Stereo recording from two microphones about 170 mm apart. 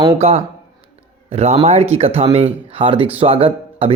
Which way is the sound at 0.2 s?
35° right (ahead or behind).